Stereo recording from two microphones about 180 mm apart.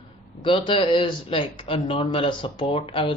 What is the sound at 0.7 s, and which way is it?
Speech, 30° left (ahead or behind).